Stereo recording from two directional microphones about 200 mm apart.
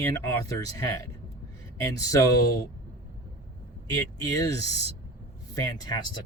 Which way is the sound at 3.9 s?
15° left (ahead or behind).